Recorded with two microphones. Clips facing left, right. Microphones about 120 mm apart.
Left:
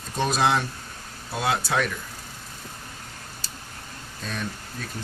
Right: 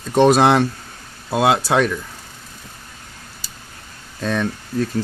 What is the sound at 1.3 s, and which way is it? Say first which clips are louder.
Speech: right 9 dB; 90° right.